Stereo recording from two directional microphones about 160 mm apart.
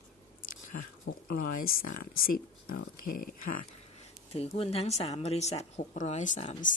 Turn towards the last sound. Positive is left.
turn(degrees=50)  # may be behind; listen again after turning